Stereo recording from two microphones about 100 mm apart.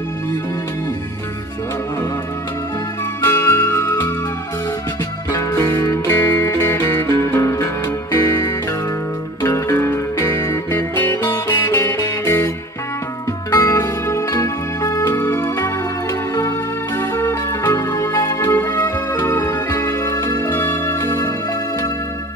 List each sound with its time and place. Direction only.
3.3 s music: 25° left (ahead or behind)
5.3 s music: 30° left (ahead or behind)
9.4 s music: 30° left (ahead or behind)
11.4 s music: 35° left (ahead or behind)
13.5 s music: 30° left (ahead or behind)
17.0 s music: 25° left (ahead or behind)
20.5 s music: 20° left (ahead or behind)